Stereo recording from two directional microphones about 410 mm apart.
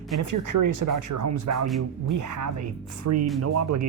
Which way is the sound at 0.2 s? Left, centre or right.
Right.